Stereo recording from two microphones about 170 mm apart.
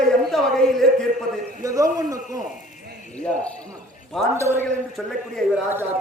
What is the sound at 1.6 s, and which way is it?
Speech, 20° right (ahead or behind).